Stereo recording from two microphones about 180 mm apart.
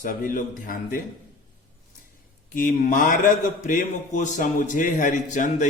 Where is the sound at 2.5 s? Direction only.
50° left (ahead or behind).